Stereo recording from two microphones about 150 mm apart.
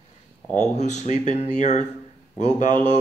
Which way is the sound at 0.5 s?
50° left (ahead or behind).